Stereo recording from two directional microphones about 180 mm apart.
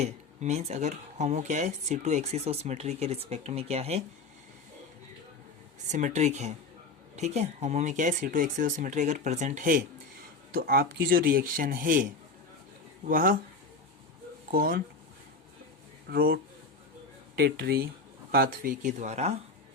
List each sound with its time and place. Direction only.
0.0 s speech: 40° right (ahead or behind)
5.9 s speech: 40° right (ahead or behind)
13.1 s speech: 50° right (ahead or behind)
14.5 s speech: 50° right (ahead or behind)
16.0 s speech: 60° right (ahead or behind); by 19.4 s 35° right (ahead or behind)